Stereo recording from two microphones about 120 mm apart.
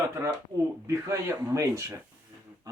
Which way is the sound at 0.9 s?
25° right (ahead or behind).